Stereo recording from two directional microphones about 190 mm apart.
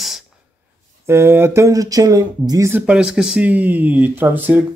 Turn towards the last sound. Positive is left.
turn(degrees=-10)  # may be behind; listen again after turning